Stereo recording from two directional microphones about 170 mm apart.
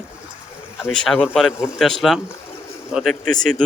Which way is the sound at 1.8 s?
Centre (ahead or behind).